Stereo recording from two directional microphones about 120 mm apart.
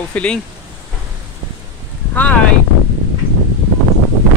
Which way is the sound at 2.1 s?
15° left (ahead or behind).